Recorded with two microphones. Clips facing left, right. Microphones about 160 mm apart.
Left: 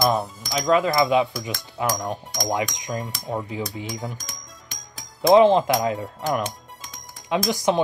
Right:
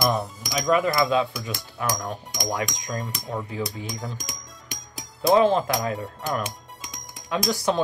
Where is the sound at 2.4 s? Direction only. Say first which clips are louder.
Left 3 dB; 20° left (ahead or behind).